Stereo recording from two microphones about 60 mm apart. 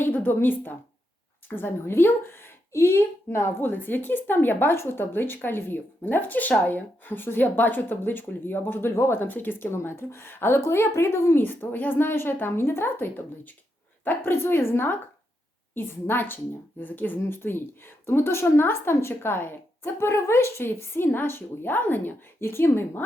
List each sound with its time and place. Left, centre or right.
0.2 s a woman's voice: left
3.6 s speech: left
8.9 s speech: left
10.6 s speech: left
11.4 s speech: left